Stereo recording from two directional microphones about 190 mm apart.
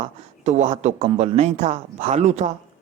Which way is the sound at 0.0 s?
35° right (ahead or behind).